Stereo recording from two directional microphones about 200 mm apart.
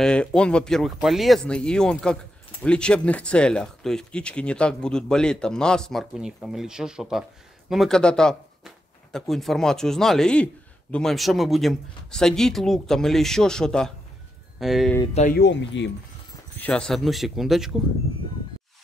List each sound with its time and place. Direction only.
0.0 s speech: 5° left (ahead or behind)
15.3 s speech: 60° left (ahead or behind)
16.5 s speech: 5° left (ahead or behind)